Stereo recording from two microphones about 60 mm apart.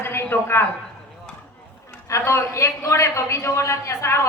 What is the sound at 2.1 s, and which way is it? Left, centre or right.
A woman's voice, left.